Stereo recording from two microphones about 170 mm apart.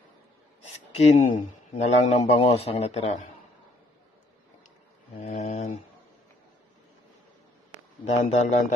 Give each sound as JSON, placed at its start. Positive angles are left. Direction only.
{"t": 1.0, "sound": "a man's voice", "side_deg": 45}
{"t": 5.4, "sound": "a sound", "side_deg": 40}
{"t": 8.0, "sound": "a man's voice", "side_deg": 40}